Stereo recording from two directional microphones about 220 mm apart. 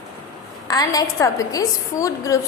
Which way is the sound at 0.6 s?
15° left (ahead or behind).